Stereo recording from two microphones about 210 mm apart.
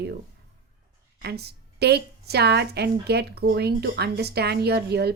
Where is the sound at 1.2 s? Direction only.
50° right (ahead or behind).